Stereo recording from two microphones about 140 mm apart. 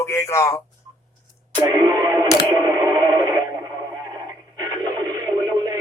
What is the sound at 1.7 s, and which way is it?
Radio, 25° right (ahead or behind).